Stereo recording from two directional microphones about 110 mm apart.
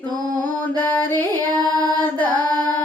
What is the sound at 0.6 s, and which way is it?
Mantra, 15° left (ahead or behind).